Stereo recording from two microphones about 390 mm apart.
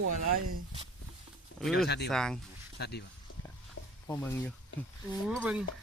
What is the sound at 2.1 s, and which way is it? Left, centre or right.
Speech, centre.